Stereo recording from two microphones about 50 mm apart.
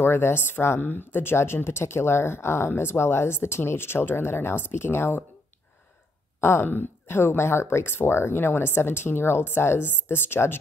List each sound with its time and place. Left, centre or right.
0.0 s speech: left
0.7 s a woman's voice: left
1.1 s speech: left
6.6 s a woman's voice: left
7.1 s speech: left